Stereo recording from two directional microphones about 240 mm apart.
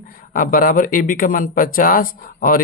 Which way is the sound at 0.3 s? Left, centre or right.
Left.